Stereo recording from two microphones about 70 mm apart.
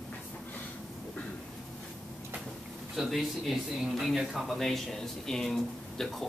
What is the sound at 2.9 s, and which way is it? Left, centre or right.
Speech, centre.